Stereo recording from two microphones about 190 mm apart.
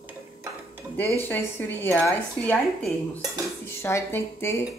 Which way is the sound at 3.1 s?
20° right (ahead or behind).